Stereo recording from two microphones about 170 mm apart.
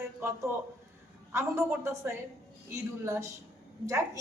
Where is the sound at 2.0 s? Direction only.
10° right (ahead or behind).